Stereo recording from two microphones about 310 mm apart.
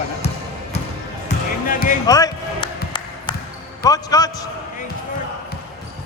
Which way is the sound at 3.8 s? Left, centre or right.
Centre.